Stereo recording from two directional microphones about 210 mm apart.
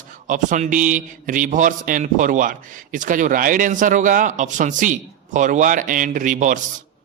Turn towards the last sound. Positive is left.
turn(degrees=-40)  # may be behind; listen again after turning